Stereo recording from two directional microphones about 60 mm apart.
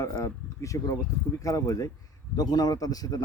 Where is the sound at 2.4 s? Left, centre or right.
Left.